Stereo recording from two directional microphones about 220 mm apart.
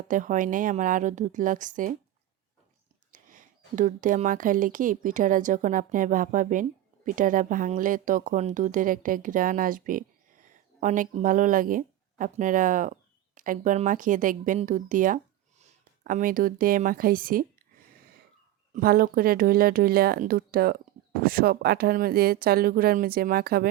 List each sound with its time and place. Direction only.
0.1 s speech: 35° right (ahead or behind)
3.1 s a woman's voice: 35° right (ahead or behind)
18.7 s speech: 40° right (ahead or behind)